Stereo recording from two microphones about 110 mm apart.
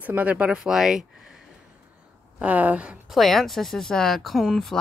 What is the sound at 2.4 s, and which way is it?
Speech, 15° right (ahead or behind).